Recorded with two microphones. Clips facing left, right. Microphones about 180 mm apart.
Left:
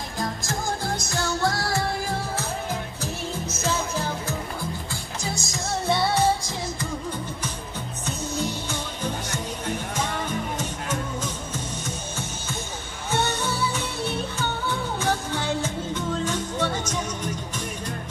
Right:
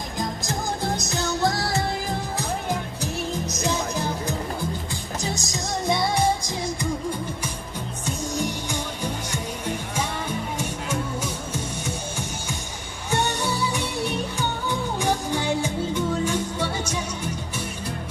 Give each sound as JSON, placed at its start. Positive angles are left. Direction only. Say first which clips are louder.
{"t": 0.2, "sound": "music", "louder": "even", "side_deg": -20}
{"t": 8.0, "sound": "music", "louder": "right 1 dB", "side_deg": -15}
{"t": 11.5, "sound": "music", "louder": "right 2 dB", "side_deg": -10}